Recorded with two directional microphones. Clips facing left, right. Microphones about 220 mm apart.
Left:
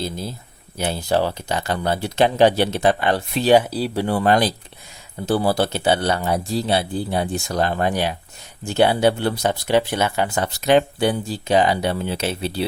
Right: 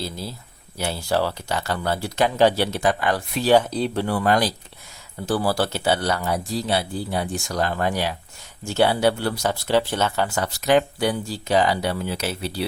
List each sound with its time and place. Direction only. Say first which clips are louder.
0.0 s speech: left 3 dB; 20° left (ahead or behind)
3.6 s speech: left 1 dB; 5° left (ahead or behind)
4.0 s speech: left 4 dB; 25° left (ahead or behind)